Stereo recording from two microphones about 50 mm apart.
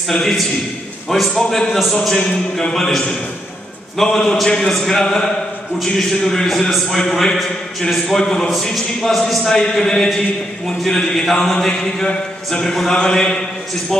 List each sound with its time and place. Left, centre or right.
0.1 s a man's voice: centre
4.0 s a man's voice: centre